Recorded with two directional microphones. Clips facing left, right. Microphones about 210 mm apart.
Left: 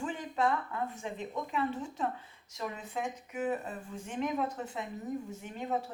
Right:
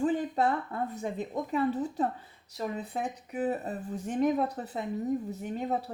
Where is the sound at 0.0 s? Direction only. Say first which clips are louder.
Right 5 dB; 35° right (ahead or behind).